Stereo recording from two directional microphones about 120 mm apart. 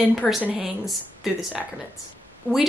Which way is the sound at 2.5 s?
15° left (ahead or behind).